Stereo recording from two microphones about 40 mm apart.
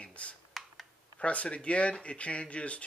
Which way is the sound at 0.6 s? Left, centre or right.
Centre.